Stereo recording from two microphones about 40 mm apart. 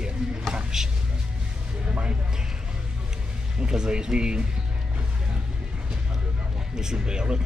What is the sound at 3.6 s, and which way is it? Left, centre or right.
Speech, right.